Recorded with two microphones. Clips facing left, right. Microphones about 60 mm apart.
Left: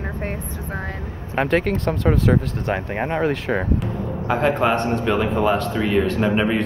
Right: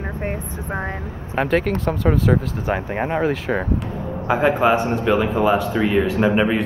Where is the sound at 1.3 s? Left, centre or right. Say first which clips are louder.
Even; centre.